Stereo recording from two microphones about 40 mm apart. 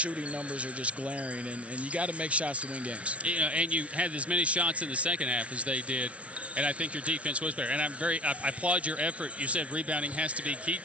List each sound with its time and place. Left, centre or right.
0.6 s speech: right